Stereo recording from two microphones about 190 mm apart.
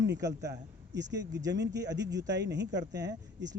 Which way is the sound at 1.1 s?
20° right (ahead or behind).